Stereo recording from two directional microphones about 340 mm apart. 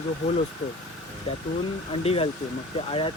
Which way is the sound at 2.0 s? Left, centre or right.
Centre.